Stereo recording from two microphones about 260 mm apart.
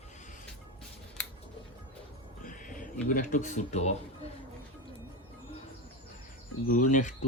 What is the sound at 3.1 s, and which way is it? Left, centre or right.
Speech, left.